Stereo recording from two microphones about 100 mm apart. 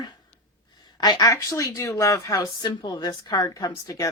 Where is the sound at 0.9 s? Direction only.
45° left (ahead or behind).